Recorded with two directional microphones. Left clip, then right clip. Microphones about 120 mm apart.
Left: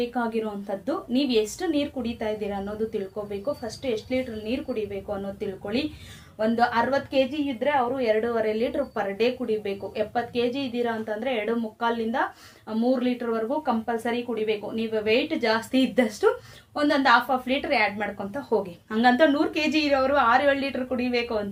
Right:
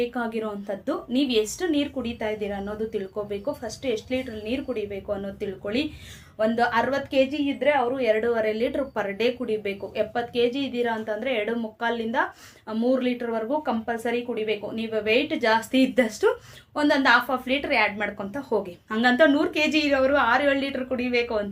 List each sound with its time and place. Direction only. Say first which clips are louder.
0.0 s a woman's voice: even; 20° right (ahead or behind)